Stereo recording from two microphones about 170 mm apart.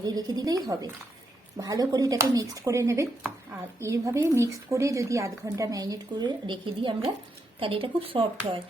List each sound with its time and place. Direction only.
0.0 s speech: 25° right (ahead or behind)